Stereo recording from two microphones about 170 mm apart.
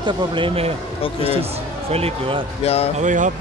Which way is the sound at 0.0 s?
30° right (ahead or behind).